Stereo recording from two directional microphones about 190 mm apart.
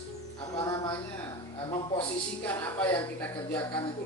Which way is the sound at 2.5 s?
10° left (ahead or behind).